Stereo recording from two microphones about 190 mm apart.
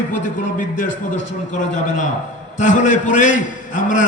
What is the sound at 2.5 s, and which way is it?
A man's voice, 40° left (ahead or behind).